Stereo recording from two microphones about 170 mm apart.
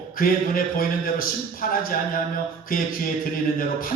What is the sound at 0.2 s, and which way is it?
A man's voice, 60° left (ahead or behind).